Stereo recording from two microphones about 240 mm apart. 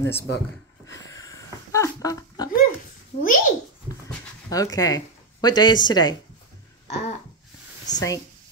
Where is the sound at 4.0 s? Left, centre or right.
Centre.